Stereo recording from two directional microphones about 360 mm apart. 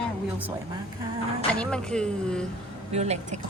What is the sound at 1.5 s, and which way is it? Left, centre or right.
Speech, centre.